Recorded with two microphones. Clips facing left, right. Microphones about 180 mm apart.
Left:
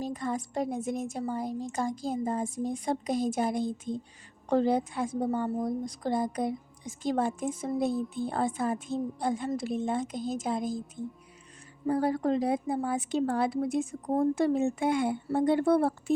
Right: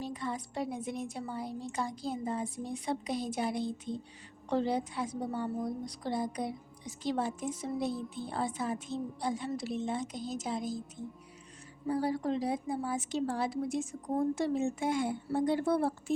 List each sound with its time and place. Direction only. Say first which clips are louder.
0.0 s a woman's voice: left 5 dB; 45° left (ahead or behind)
11.9 s a woman's voice: left 5 dB; 55° left (ahead or behind)